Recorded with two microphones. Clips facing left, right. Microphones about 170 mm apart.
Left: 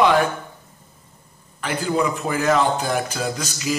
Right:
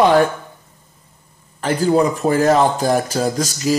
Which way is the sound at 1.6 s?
40° right (ahead or behind).